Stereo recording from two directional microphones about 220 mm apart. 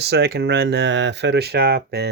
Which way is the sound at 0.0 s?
50° right (ahead or behind).